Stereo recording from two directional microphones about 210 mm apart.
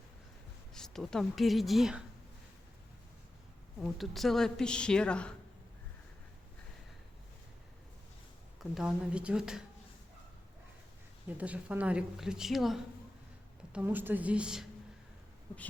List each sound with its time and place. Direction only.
0.7 s speech: centre (ahead or behind)
3.8 s speech: centre (ahead or behind)
8.5 s speech: centre (ahead or behind)
11.3 s a woman's voice: 5° right (ahead or behind)